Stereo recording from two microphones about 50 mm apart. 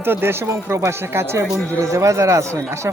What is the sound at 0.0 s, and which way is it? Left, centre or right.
Speech, right.